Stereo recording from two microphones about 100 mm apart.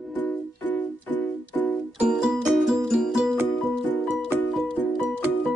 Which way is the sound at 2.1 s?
5° right (ahead or behind).